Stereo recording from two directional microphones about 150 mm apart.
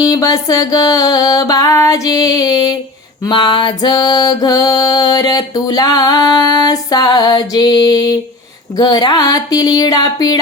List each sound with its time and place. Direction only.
0.0 s music: 25° left (ahead or behind)